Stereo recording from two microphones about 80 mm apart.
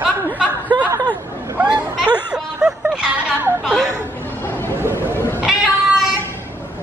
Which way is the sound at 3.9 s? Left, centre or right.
Left.